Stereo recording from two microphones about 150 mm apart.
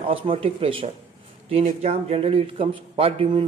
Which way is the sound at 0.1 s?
40° right (ahead or behind).